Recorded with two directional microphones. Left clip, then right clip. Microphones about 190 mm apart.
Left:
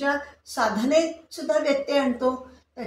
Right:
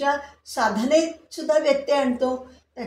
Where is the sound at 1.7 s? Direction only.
45° right (ahead or behind).